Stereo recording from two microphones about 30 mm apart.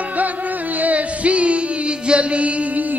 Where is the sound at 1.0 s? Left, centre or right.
Right.